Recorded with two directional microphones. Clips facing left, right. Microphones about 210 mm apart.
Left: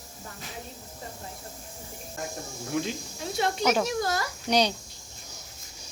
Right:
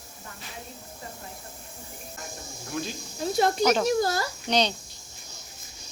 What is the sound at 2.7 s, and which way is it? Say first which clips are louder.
Speech: left 3 dB; 20° left (ahead or behind).